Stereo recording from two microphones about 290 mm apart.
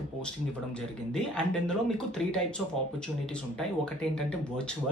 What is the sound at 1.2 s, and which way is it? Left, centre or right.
Speech, centre.